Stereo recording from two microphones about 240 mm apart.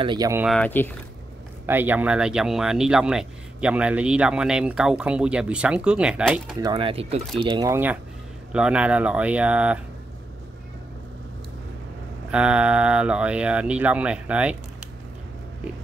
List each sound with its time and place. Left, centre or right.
0.0 s speech: centre
0.5 s speech: centre
1.7 s speech: centre
6.6 s speech: right
12.3 s speech: centre